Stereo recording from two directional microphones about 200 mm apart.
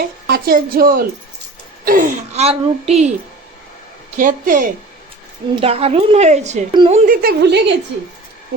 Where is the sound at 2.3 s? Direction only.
30° right (ahead or behind).